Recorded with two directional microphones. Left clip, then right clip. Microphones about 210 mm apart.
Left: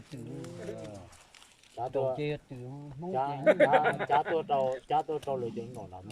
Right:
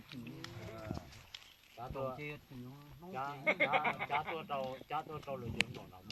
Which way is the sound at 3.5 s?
50° left (ahead or behind).